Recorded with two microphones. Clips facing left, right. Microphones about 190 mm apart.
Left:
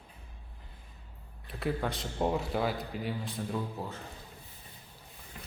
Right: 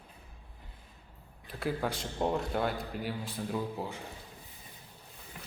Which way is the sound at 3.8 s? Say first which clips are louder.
Right 1 dB; 10° right (ahead or behind).